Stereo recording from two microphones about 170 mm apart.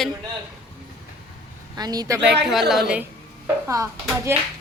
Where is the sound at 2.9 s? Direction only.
10° right (ahead or behind).